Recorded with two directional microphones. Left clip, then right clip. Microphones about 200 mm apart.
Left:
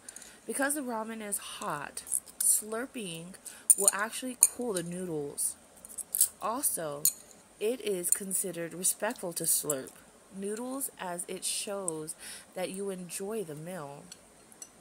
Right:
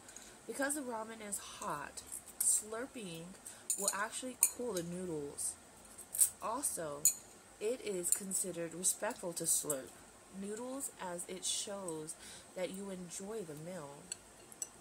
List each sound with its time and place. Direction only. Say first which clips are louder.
0.5 s speech: left 6 dB; 35° left (ahead or behind)
6.1 s speech: left 5 dB; 40° left (ahead or behind)